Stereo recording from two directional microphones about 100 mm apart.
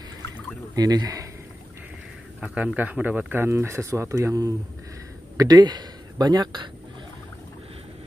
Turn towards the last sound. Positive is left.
turn(degrees=-50)  # may be behind; listen again after turning